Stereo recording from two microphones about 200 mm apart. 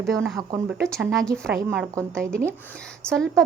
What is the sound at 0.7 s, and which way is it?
Speech, centre (ahead or behind).